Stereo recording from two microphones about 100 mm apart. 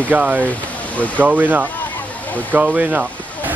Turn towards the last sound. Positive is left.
turn(degrees=-15)  # may be behind; listen again after turning